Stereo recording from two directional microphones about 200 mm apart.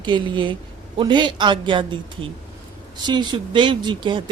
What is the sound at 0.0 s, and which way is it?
Speech, 25° right (ahead or behind).